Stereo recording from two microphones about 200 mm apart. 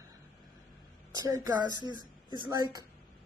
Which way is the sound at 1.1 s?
20° right (ahead or behind).